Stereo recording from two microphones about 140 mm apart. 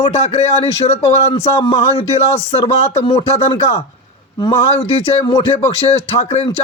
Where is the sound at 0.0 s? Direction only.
55° left (ahead or behind).